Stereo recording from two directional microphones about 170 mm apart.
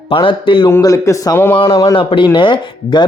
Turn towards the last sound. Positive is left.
turn(degrees=25)  # may be behind; listen again after turning